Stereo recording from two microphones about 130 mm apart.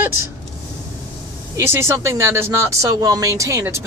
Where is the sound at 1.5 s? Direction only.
20° right (ahead or behind).